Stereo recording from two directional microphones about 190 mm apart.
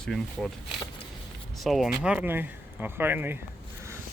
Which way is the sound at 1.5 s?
Centre (ahead or behind).